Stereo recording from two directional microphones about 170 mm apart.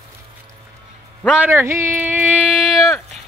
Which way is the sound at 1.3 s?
10° right (ahead or behind).